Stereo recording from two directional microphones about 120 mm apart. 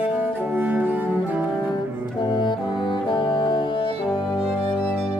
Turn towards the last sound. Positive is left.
turn(degrees=40)  # may be behind; listen again after turning